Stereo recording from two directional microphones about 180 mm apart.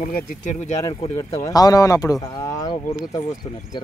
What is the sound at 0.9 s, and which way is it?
Speech, 15° left (ahead or behind).